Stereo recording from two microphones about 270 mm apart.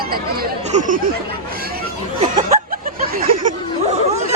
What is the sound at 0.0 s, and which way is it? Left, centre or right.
Speech, right.